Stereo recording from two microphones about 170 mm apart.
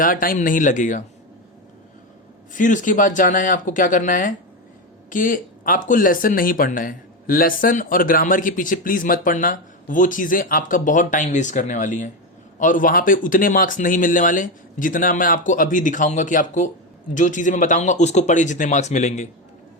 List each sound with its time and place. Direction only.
0.0 s speech: 55° left (ahead or behind)
2.6 s speech: 50° left (ahead or behind)